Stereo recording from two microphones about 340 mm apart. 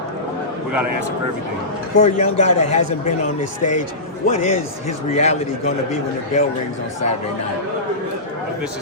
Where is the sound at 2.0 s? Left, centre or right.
Centre.